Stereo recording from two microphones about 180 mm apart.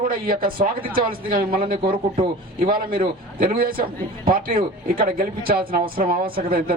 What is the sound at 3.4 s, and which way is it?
A man's voice, 55° right (ahead or behind).